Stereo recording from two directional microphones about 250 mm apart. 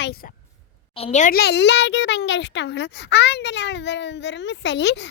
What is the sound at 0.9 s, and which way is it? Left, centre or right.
A child's voice, left.